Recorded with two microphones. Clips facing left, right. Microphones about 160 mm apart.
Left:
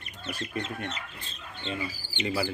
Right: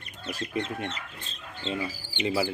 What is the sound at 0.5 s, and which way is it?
Speech, 25° right (ahead or behind).